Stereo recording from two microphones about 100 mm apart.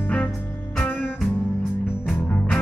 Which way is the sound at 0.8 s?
20° left (ahead or behind).